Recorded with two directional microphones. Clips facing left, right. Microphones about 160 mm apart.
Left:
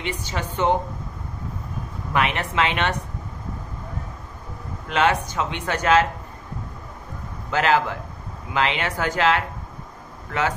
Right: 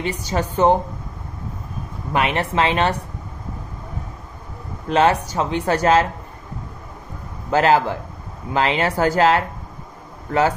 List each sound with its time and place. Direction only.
0.0 s speech: 35° right (ahead or behind)
2.1 s speech: 35° right (ahead or behind)
4.8 s speech: 35° right (ahead or behind)
7.5 s speech: 35° right (ahead or behind)